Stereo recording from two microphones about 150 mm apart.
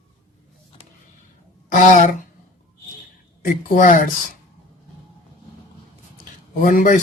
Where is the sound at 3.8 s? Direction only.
65° left (ahead or behind).